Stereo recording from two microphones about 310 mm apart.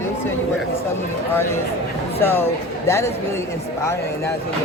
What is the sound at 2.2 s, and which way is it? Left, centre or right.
Speech, centre.